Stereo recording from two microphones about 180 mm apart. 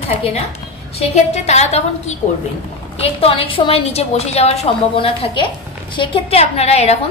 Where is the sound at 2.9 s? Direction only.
35° left (ahead or behind).